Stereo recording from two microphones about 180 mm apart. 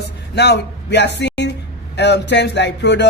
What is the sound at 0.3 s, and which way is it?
A man's voice, 70° left (ahead or behind).